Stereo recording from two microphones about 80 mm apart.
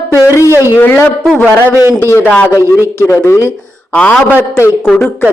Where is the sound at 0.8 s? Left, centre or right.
Left.